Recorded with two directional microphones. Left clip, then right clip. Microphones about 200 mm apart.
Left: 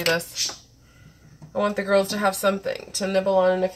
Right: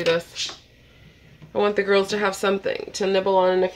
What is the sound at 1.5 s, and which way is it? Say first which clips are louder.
Speech: right 2 dB; 40° right (ahead or behind).